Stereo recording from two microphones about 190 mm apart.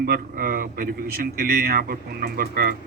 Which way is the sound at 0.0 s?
50° right (ahead or behind).